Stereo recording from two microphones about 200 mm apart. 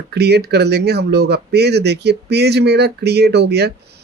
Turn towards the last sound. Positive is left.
turn(degrees=-55)  # may be behind; listen again after turning